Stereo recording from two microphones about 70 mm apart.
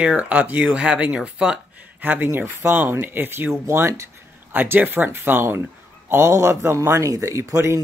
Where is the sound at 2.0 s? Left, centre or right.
Right.